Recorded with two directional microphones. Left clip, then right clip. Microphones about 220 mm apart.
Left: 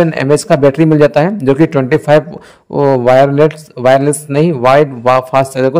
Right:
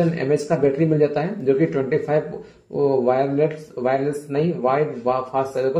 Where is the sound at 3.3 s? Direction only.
50° left (ahead or behind).